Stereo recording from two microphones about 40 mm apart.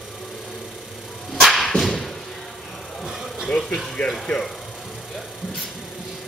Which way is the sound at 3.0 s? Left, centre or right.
Centre.